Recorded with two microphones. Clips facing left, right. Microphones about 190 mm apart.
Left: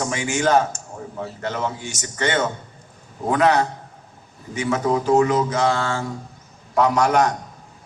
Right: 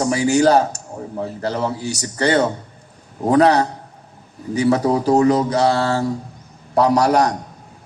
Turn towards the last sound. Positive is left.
turn(degrees=-35)  # may be behind; listen again after turning